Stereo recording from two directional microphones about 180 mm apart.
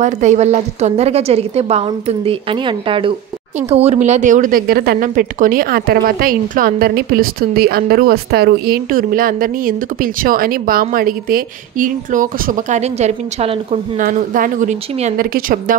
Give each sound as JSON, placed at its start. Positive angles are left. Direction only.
{"t": 0.0, "sound": "a woman's voice", "side_deg": -40}
{"t": 3.7, "sound": "a woman's voice", "side_deg": -35}